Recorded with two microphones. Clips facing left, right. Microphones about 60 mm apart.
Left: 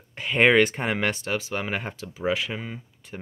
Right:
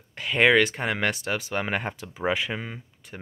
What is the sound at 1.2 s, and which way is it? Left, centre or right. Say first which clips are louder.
Speech: even; centre.